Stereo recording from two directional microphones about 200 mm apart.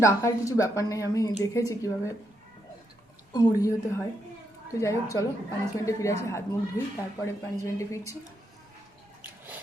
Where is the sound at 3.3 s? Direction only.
20° left (ahead or behind).